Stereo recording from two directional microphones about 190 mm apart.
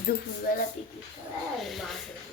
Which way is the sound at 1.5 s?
Centre (ahead or behind).